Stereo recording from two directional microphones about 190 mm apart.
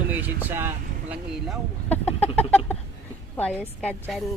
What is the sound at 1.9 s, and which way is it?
Chicken, 10° left (ahead or behind).